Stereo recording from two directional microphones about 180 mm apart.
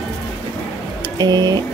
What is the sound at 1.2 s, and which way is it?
Speech, 20° right (ahead or behind).